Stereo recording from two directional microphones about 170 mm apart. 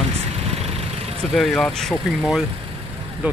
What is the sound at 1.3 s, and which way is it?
Speech, centre (ahead or behind).